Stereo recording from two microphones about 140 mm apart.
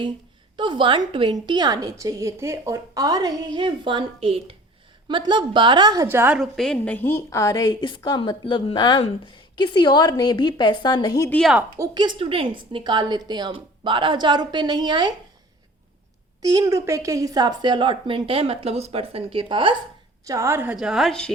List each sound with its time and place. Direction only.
0.5 s a woman's voice: 35° right (ahead or behind)
6.1 s a woman's voice: 15° right (ahead or behind)
6.4 s a woman's voice: 5° left (ahead or behind); by 11.3 s 25° left (ahead or behind)
11.3 s a woman's voice: 5° left (ahead or behind)
11.8 s a woman's voice: 30° right (ahead or behind)
16.4 s a woman's voice: 25° right (ahead or behind)
20.2 s a woman's voice: 20° right (ahead or behind); by 21.3 s 5° left (ahead or behind)